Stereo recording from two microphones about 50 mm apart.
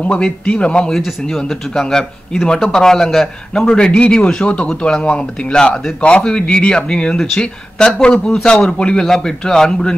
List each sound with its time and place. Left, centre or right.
0.2 s speech: left
0.9 s speech: centre